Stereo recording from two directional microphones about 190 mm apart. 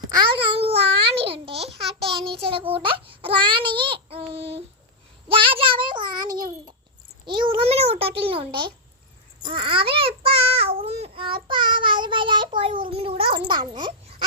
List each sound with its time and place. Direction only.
0.1 s babbling: 25° right (ahead or behind)
2.4 s a child's voice: 30° right (ahead or behind)
10.6 s babbling: 30° right (ahead or behind)
11.4 s a child's voice: 25° right (ahead or behind)